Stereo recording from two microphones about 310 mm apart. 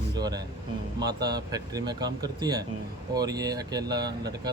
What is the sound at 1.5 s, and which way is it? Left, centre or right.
Speech, centre.